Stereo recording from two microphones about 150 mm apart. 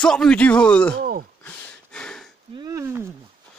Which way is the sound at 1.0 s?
80° right.